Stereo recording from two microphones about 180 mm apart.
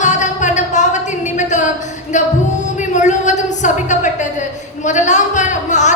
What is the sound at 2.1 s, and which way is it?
Music, 40° left (ahead or behind).